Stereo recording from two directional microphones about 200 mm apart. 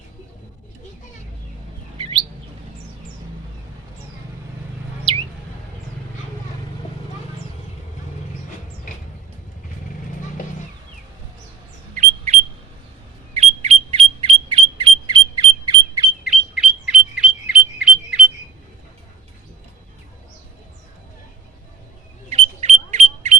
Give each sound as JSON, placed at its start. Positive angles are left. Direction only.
{"t": 11.9, "sound": "a sound", "side_deg": -35}
{"t": 16.2, "sound": "bird", "side_deg": -5}
{"t": 22.3, "sound": "smoke detector", "side_deg": -35}